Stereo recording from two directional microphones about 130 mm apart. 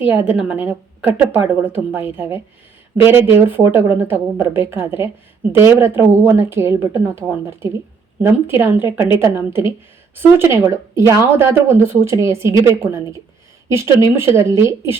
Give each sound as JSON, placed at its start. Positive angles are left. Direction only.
{"t": 0.0, "sound": "a woman's voice", "side_deg": -15}